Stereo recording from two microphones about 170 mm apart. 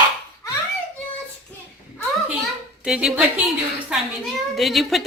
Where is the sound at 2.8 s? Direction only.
5° right (ahead or behind).